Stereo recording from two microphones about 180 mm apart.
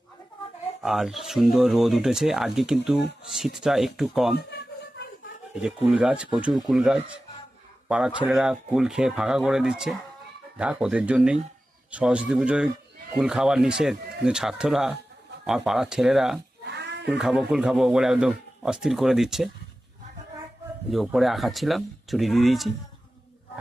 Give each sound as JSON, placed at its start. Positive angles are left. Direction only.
{"t": 0.8, "sound": "speech", "side_deg": 0}
{"t": 5.5, "sound": "a man's voice", "side_deg": -5}
{"t": 16.6, "sound": "cat", "side_deg": -70}
{"t": 17.1, "sound": "speech", "side_deg": -5}
{"t": 20.9, "sound": "speech", "side_deg": 0}